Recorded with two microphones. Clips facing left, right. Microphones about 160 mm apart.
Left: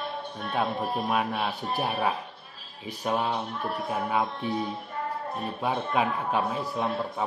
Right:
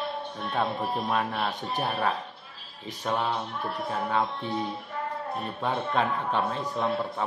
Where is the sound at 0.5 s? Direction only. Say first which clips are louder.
Left 1 dB; 10° left (ahead or behind).